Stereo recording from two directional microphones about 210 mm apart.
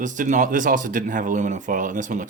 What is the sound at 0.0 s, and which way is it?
Speech, 35° right (ahead or behind).